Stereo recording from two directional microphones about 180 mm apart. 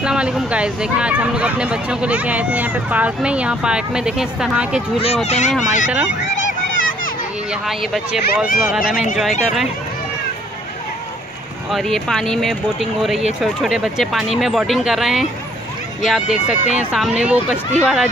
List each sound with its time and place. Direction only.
0.0 s speech: 5° right (ahead or behind)
4.9 s speech: 35° left (ahead or behind)
6.3 s a sound: 90° left
7.6 s speech: centre (ahead or behind)
11.7 s speech: centre (ahead or behind)